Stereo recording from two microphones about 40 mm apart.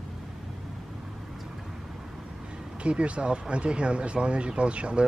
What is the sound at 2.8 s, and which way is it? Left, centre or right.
Speech, right.